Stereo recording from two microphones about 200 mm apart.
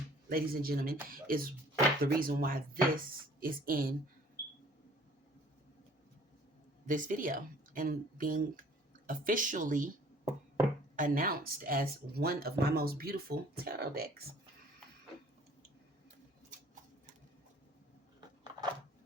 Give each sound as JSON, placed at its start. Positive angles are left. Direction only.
{"t": 0.3, "sound": "speech", "side_deg": -45}
{"t": 6.8, "sound": "speech", "side_deg": -40}
{"t": 10.9, "sound": "speech", "side_deg": -40}